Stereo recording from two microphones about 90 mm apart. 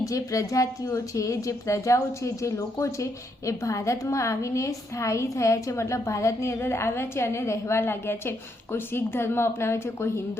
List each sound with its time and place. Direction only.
0.0 s a woman's voice: 35° left (ahead or behind)